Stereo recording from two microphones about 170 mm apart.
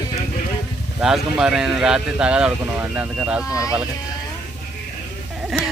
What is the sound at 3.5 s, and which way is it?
Speech, 20° left (ahead or behind).